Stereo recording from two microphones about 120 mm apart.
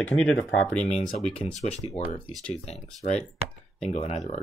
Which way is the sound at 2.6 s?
65° left (ahead or behind).